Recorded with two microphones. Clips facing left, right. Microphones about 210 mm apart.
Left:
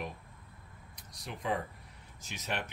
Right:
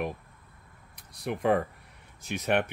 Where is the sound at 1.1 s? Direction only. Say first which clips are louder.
Right 10 dB; 60° right (ahead or behind).